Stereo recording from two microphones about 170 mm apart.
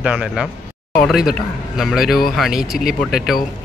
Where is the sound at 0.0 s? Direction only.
5° right (ahead or behind).